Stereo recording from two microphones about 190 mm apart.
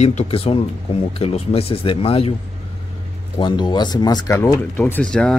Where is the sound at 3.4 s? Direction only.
25° left (ahead or behind).